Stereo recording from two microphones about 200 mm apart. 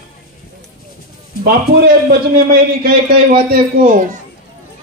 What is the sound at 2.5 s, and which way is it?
A man's voice, 50° right (ahead or behind).